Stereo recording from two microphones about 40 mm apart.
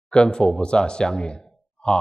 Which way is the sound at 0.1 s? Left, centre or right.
Left.